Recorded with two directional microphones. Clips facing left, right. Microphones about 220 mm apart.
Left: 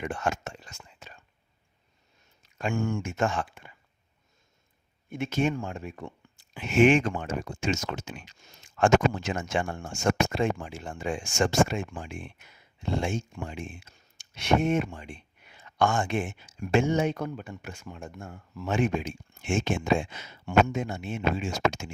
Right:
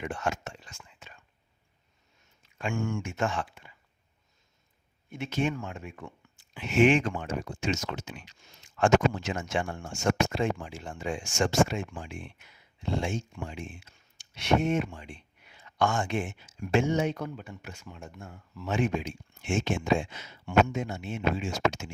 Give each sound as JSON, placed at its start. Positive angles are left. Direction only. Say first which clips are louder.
{"t": 0.0, "sound": "whispering", "louder": "left 2 dB", "side_deg": 50}
{"t": 2.4, "sound": "speech", "louder": "left 3 dB", "side_deg": 40}
{"t": 5.1, "sound": "speech", "louder": "left 3 dB", "side_deg": 45}